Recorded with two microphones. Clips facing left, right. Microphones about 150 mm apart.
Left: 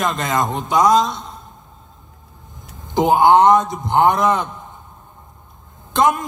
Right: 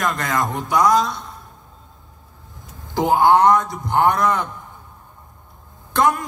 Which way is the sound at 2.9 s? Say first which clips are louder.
Left 2 dB; 20° left (ahead or behind).